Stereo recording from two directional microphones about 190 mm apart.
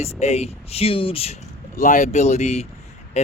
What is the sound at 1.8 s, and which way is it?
Speech, 40° left (ahead or behind).